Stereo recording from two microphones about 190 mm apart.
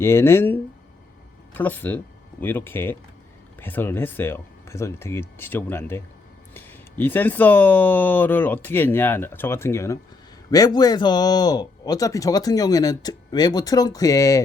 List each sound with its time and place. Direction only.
0.0 s a man's voice: 15° left (ahead or behind)